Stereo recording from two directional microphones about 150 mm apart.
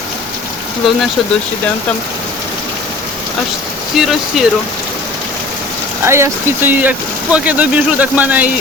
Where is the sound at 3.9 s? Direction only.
Centre (ahead or behind).